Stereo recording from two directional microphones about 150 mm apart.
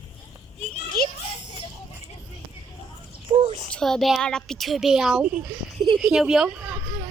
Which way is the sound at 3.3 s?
40° right (ahead or behind).